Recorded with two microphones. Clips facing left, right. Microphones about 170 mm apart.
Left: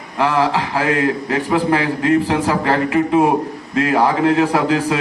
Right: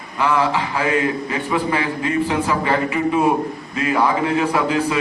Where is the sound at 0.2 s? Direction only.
85° left.